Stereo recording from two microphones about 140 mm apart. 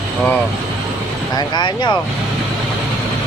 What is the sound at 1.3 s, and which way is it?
Speech, 30° left (ahead or behind).